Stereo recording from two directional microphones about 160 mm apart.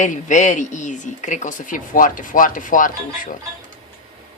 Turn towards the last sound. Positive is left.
turn(degrees=55)  # may be behind; listen again after turning